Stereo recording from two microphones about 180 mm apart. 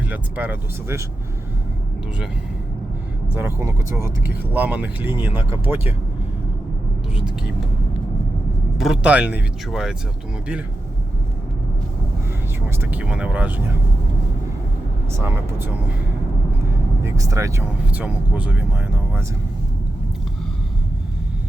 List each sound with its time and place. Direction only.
0.1 s speech: 10° right (ahead or behind)
3.3 s speech: 15° right (ahead or behind)
8.8 s speech: 5° right (ahead or behind)
12.6 s speech: 10° right (ahead or behind)
15.2 s speech: 10° right (ahead or behind)
17.0 s speech: 15° right (ahead or behind)